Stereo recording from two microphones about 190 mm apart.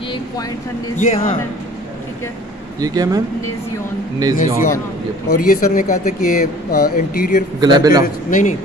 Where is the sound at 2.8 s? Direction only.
20° right (ahead or behind).